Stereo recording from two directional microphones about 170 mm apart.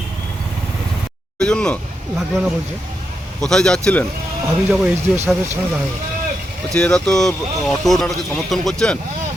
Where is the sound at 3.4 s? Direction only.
5° left (ahead or behind).